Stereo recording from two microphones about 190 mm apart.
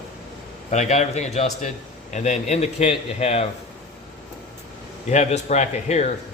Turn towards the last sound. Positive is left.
turn(degrees=35)  # may be behind; listen again after turning